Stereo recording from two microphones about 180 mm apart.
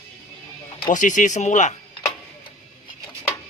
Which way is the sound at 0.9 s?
45° left (ahead or behind).